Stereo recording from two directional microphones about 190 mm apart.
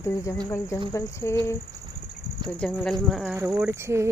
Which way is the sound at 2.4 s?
5° left (ahead or behind).